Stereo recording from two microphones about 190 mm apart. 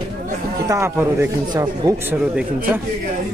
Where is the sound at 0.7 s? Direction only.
15° right (ahead or behind).